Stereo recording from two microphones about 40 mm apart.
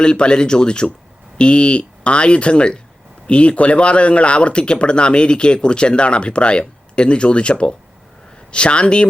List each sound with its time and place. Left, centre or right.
0.0 s speech: left